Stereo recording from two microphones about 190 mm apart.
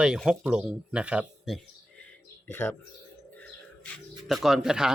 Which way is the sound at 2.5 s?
10° left (ahead or behind).